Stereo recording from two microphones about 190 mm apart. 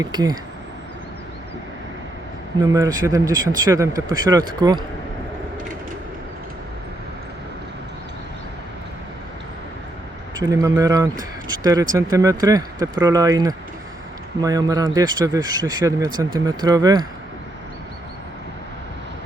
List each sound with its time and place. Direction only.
0.0 s speech: 20° right (ahead or behind)
2.6 s speech: 15° right (ahead or behind)
10.4 s speech: 20° right (ahead or behind)